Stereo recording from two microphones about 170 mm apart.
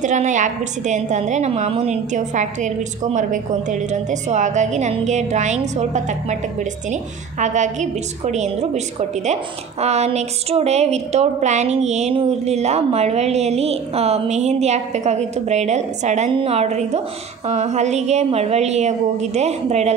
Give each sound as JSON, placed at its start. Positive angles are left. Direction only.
{"t": 0.0, "sound": "a woman's voice", "side_deg": -45}